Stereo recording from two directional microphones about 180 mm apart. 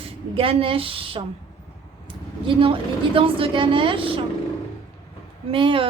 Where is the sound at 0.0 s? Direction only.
30° right (ahead or behind).